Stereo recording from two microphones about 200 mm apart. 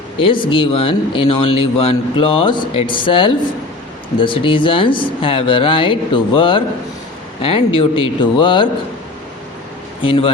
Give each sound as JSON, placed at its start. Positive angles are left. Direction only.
{"t": 0.2, "sound": "speech", "side_deg": 25}
{"t": 10.0, "sound": "speech", "side_deg": 25}